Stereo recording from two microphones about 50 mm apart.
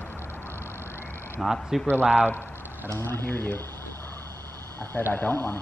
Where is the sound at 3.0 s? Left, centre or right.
Left.